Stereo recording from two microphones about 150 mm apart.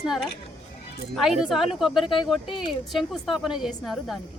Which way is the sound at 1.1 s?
5° right (ahead or behind).